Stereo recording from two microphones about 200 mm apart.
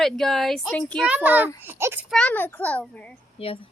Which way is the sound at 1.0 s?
10° right (ahead or behind).